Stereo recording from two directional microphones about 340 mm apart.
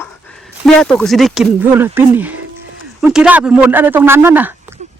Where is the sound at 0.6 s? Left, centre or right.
Centre.